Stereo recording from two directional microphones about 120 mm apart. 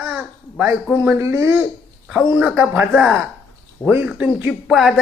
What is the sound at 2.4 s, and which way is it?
Speech, 10° right (ahead or behind).